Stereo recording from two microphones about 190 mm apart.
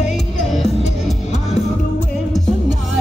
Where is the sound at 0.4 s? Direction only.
Centre (ahead or behind).